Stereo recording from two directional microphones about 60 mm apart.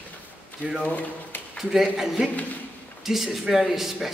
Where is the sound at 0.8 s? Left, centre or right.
Left.